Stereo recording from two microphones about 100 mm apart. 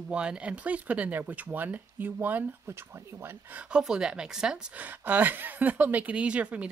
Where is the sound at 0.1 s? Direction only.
10° right (ahead or behind).